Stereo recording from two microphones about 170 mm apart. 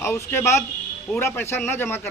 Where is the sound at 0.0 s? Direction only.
15° left (ahead or behind).